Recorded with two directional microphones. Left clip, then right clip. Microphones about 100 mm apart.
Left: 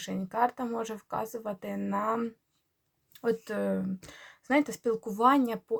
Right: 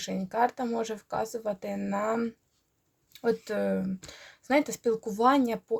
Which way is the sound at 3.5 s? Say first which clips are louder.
Right 2 dB; 35° right (ahead or behind).